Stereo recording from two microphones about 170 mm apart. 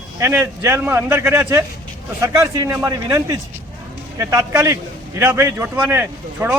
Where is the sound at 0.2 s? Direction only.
15° right (ahead or behind).